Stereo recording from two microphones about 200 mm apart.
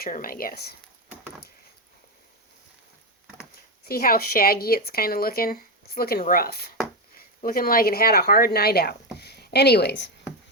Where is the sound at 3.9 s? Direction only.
50° left (ahead or behind).